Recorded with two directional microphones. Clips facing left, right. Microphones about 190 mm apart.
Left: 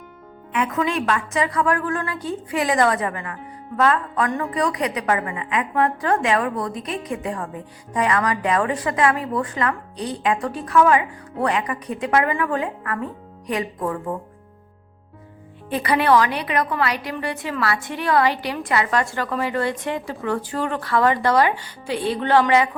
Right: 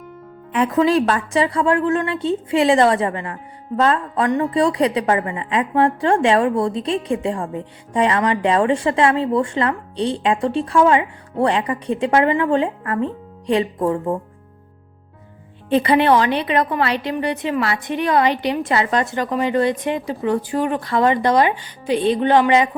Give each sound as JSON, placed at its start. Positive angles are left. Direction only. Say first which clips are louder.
{"t": 0.5, "sound": "a woman's voice", "louder": "right 7 dB", "side_deg": -35}
{"t": 15.7, "sound": "a woman's voice", "louder": "right 3 dB", "side_deg": -25}